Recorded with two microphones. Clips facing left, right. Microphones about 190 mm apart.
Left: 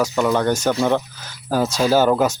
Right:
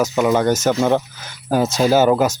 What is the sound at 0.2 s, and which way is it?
Speech, 10° right (ahead or behind).